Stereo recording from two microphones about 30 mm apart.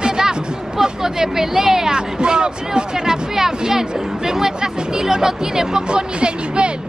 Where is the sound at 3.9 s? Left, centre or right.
Right.